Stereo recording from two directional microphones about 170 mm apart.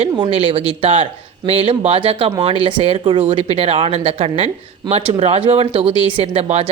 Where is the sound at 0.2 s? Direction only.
35° right (ahead or behind).